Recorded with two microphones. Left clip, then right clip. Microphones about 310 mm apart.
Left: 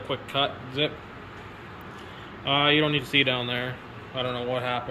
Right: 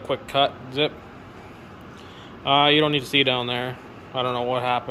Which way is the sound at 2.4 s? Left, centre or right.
Centre.